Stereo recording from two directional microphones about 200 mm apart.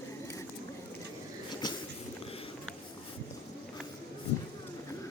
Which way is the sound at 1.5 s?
20° left (ahead or behind).